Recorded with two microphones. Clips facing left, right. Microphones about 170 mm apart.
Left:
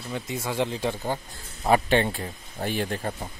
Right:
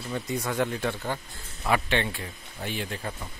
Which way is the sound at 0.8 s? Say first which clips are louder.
Left 2 dB; 15° left (ahead or behind).